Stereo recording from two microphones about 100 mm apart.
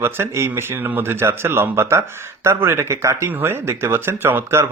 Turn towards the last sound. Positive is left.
turn(degrees=-25)  # may be behind; listen again after turning